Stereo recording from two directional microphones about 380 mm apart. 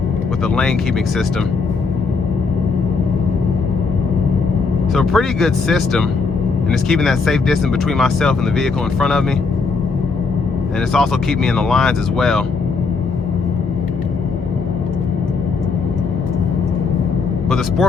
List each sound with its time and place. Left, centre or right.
4.9 s speech: centre
10.9 s speech: centre